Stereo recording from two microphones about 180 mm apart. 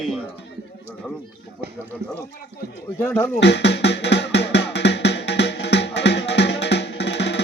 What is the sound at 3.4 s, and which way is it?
Music, 75° left (ahead or behind).